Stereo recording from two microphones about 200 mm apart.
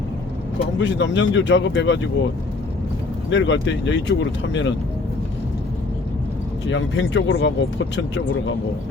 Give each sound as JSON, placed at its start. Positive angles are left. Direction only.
{"t": 0.8, "sound": "speech", "side_deg": 65}
{"t": 3.2, "sound": "speech", "side_deg": 65}
{"t": 6.7, "sound": "speech", "side_deg": 65}